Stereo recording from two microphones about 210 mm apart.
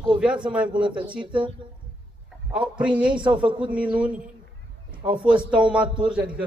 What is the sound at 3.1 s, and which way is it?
Speech, 25° right (ahead or behind).